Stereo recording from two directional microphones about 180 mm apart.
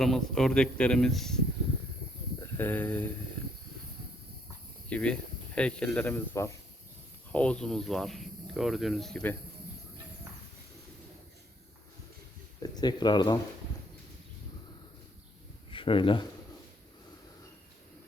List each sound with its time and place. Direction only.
0.0 s speech: centre (ahead or behind)
2.4 s speech: 10° left (ahead or behind)
4.9 s a man's voice: 5° left (ahead or behind)
12.6 s speech: 20° left (ahead or behind)
15.7 s speech: 30° left (ahead or behind)